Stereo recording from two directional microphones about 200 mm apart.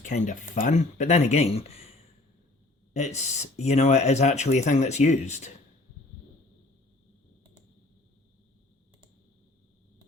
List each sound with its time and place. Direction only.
0.0 s speech: 35° left (ahead or behind)
2.9 s speech: 35° left (ahead or behind)